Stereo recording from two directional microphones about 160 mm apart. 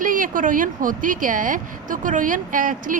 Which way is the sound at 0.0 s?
55° right (ahead or behind).